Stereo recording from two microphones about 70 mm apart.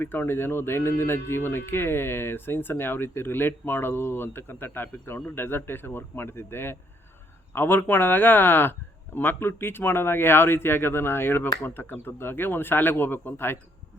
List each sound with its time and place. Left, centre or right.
0.0 s speech: left